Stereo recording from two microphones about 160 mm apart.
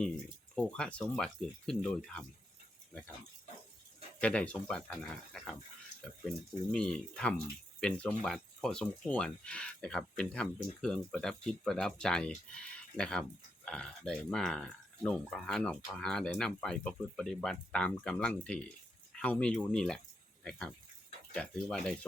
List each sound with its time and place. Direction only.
0.5 s speech: 5° left (ahead or behind)
4.2 s speech: 5° left (ahead or behind)
6.7 s speech: 5° left (ahead or behind)